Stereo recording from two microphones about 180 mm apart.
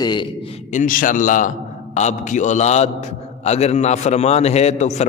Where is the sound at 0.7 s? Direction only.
45° left (ahead or behind).